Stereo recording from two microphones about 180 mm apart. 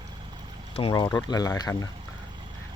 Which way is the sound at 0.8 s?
25° left (ahead or behind).